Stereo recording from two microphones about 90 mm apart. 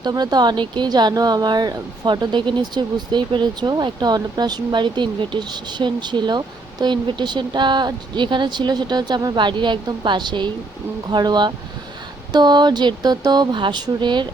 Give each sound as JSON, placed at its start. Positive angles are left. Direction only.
{"t": 0.0, "sound": "speech", "side_deg": -50}